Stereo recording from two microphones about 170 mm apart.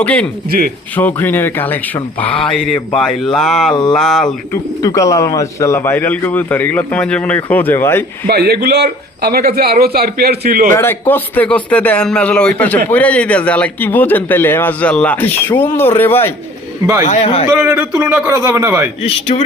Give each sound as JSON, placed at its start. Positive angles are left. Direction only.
{"t": 0.0, "sound": "a man's voice", "side_deg": 10}
{"t": 4.8, "sound": "a man's voice", "side_deg": 20}
{"t": 8.3, "sound": "speech", "side_deg": -70}
{"t": 10.8, "sound": "a man's voice", "side_deg": 15}
{"t": 16.8, "sound": "speech", "side_deg": -20}
{"t": 17.1, "sound": "a man's voice", "side_deg": 40}
{"t": 17.5, "sound": "a man's voice", "side_deg": -15}
{"t": 19.3, "sound": "a man's voice", "side_deg": 35}